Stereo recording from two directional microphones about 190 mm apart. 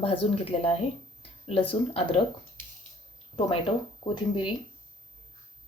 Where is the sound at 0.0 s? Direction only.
30° left (ahead or behind).